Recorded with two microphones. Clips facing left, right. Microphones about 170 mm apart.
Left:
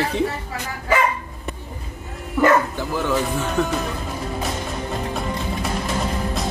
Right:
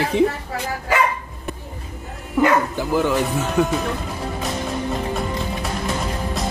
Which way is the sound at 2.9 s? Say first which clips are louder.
Right 3 dB; 10° right (ahead or behind).